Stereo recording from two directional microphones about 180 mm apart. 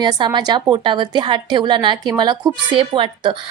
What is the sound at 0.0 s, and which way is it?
A woman's voice, 25° right (ahead or behind).